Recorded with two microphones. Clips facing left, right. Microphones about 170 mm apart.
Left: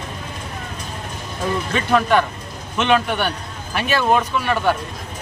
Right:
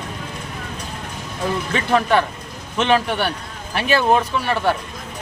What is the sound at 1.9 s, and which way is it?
Speech, centre (ahead or behind).